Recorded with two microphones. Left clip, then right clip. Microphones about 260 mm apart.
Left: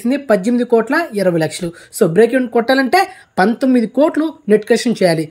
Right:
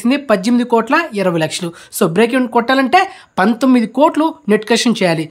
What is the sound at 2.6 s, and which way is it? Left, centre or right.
Speech, centre.